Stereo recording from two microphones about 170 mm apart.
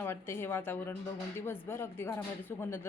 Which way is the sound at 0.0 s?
15° left (ahead or behind).